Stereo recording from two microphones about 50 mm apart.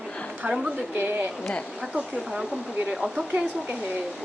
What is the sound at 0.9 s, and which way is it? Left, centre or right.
Speech, right.